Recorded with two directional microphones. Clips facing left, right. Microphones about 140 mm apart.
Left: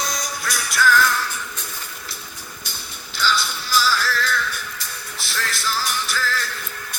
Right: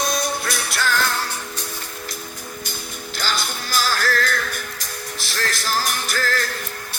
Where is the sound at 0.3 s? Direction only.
25° right (ahead or behind).